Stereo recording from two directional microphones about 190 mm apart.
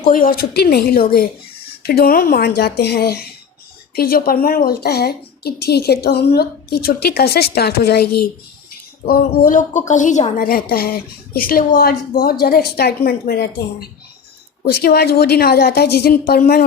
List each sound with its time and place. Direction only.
0.0 s a woman's voice: 50° left (ahead or behind)
9.0 s a woman's voice: 50° left (ahead or behind)